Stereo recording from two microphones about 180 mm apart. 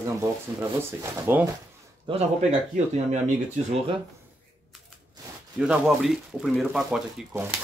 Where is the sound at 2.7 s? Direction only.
45° right (ahead or behind).